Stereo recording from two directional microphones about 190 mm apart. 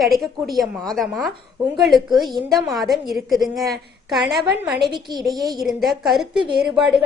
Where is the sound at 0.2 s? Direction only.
Centre (ahead or behind).